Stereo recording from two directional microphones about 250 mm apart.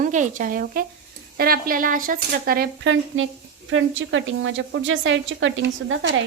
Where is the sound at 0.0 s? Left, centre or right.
Right.